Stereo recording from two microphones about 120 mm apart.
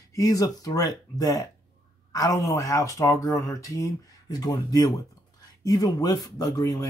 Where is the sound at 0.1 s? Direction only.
30° left (ahead or behind).